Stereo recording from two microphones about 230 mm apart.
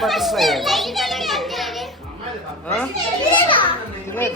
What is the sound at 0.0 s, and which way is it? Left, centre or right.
Children playing, centre.